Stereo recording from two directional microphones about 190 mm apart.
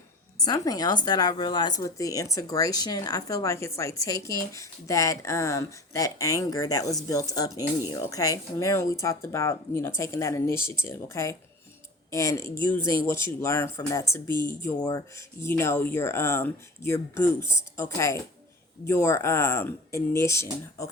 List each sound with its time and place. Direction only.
0.3 s a woman's voice: 20° left (ahead or behind)